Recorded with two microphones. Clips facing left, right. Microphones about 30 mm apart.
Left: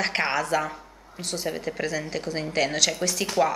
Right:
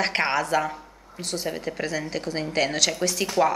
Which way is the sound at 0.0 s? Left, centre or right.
Centre.